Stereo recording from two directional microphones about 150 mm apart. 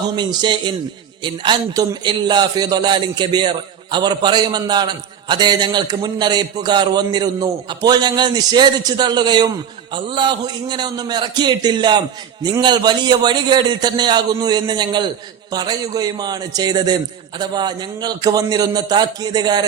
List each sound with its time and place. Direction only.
0.2 s a man's voice: 30° right (ahead or behind)